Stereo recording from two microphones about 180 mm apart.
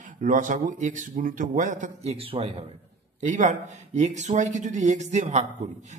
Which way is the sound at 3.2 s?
45° right (ahead or behind).